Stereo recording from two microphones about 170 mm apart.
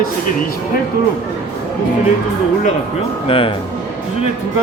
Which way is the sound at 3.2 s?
30° left (ahead or behind).